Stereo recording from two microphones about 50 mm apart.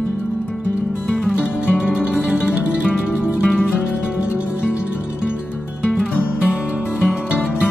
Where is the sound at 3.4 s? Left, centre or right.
Centre.